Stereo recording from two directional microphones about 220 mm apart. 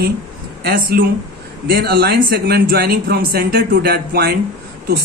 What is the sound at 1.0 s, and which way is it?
Speech, 45° right (ahead or behind).